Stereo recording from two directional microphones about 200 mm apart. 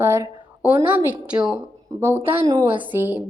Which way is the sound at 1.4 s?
20° right (ahead or behind).